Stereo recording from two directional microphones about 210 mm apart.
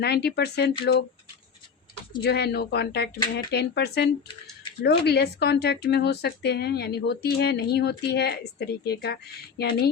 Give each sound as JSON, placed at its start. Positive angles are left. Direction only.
{"t": 0.0, "sound": "speech", "side_deg": 50}
{"t": 2.2, "sound": "speech", "side_deg": 50}